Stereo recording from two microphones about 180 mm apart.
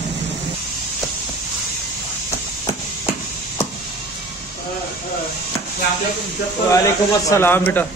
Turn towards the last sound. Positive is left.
turn(degrees=10)  # may be behind; listen again after turning